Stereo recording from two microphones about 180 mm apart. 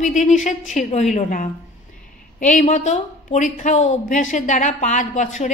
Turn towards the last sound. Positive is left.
turn(degrees=40)  # may be behind; listen again after turning